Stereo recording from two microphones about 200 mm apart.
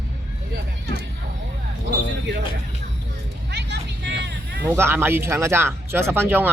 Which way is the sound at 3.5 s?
60° right (ahead or behind).